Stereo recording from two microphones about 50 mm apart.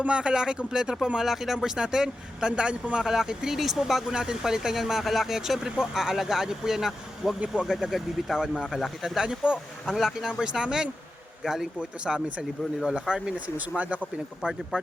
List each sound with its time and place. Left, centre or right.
0.0 s speech: centre
9.1 s speech: centre
13.6 s speech: right